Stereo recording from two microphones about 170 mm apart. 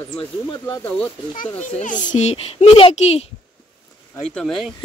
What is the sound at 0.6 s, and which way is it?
Speech, 20° left (ahead or behind).